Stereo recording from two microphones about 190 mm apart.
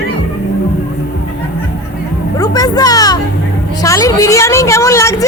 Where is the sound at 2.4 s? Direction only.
20° left (ahead or behind).